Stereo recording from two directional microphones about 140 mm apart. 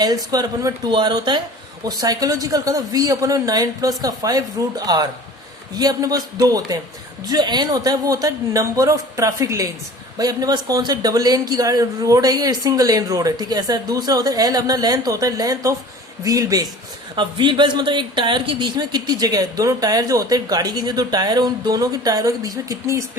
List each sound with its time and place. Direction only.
0.0 s speech: 30° right (ahead or behind)